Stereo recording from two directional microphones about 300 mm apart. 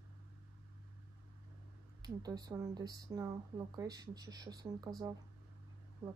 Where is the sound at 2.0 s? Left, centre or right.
Centre.